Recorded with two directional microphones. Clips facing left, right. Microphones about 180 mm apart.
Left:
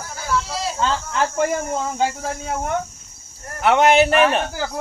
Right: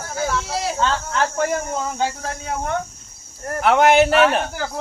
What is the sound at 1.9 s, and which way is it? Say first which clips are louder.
Speech: left 2 dB; 10° left (ahead or behind).